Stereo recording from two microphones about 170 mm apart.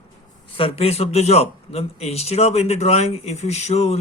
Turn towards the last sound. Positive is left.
turn(degrees=40)  # may be behind; listen again after turning